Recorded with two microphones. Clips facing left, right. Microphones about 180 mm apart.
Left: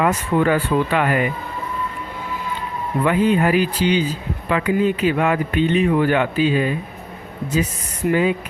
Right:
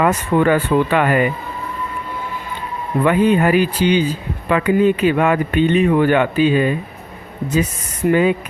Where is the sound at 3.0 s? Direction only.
60° right (ahead or behind).